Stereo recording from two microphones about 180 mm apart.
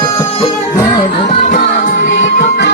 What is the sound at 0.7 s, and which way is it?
Music, 25° left (ahead or behind).